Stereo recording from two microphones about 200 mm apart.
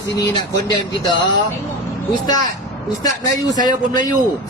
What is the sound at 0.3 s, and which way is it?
Speech, 20° left (ahead or behind).